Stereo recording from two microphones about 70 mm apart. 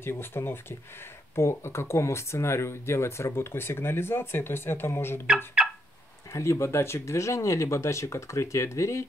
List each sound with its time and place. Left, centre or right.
0.0 s speech: left
5.6 s fowl: centre
6.3 s speech: left